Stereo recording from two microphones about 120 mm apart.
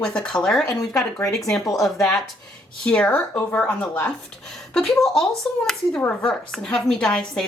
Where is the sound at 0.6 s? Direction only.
25° left (ahead or behind).